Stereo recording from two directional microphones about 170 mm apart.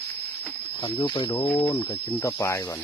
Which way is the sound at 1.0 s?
25° left (ahead or behind).